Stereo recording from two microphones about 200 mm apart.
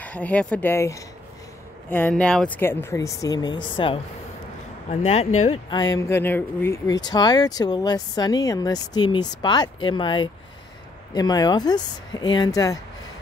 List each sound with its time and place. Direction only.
0.0 s speech: 5° left (ahead or behind); by 5.3 s 30° left (ahead or behind)
5.7 s speech: 20° left (ahead or behind)